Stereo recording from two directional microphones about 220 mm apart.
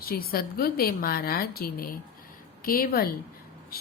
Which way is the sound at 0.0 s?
40° left (ahead or behind).